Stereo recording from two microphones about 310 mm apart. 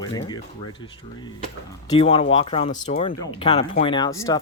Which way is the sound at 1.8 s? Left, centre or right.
Centre.